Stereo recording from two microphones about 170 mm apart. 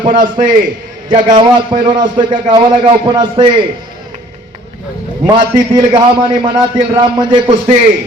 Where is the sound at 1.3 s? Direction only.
30° right (ahead or behind).